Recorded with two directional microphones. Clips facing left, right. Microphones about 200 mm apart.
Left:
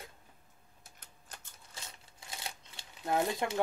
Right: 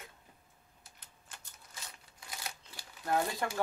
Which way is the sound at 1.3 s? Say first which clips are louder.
Left 2 dB; 40° left (ahead or behind).